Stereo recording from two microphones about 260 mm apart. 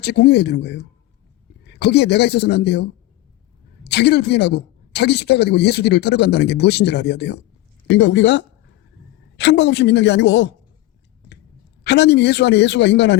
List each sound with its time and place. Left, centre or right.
0.0 s speech: left
11.8 s speech: left